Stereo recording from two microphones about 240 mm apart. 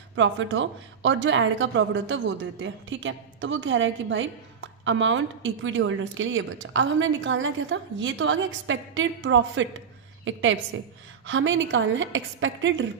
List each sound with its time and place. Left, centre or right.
0.2 s a woman's voice: right